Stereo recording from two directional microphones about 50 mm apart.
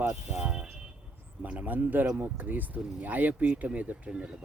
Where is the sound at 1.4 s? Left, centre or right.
Right.